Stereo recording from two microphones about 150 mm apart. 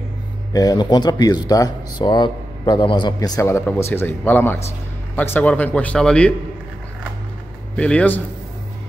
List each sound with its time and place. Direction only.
0.5 s speech: 25° left (ahead or behind); by 6.3 s 5° left (ahead or behind)
7.7 s speech: 10° left (ahead or behind)